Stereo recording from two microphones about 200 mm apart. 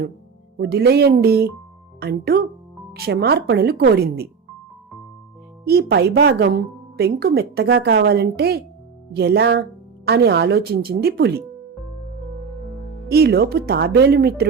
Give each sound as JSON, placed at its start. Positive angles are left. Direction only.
{"t": 0.5, "sound": "speech", "side_deg": -50}
{"t": 5.6, "sound": "speech", "side_deg": -50}
{"t": 13.1, "sound": "speech", "side_deg": -50}